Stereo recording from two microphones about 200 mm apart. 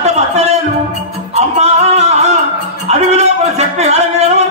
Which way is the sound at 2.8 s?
35° right (ahead or behind).